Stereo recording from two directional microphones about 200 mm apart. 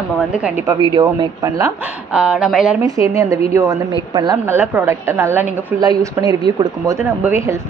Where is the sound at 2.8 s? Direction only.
15° right (ahead or behind).